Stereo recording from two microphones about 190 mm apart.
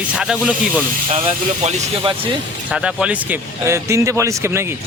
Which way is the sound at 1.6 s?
30° right (ahead or behind).